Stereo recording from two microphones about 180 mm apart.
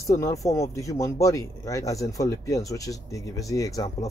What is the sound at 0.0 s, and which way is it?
Speech, 15° left (ahead or behind).